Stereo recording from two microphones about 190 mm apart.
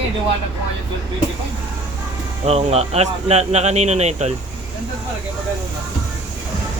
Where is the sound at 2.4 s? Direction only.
35° right (ahead or behind).